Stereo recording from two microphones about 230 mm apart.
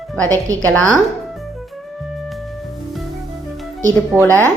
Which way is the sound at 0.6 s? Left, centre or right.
Centre.